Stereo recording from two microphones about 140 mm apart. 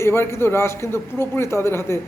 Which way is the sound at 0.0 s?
20° left (ahead or behind).